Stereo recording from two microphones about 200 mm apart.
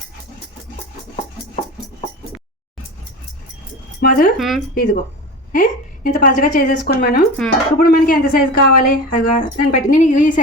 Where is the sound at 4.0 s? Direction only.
50° left (ahead or behind).